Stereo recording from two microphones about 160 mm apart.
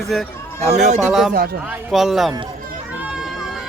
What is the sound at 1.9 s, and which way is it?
Speech, centre (ahead or behind).